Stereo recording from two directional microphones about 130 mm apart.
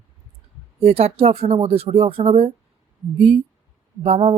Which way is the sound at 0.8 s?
50° right (ahead or behind).